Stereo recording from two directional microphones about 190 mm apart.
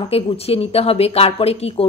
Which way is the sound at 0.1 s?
30° left (ahead or behind).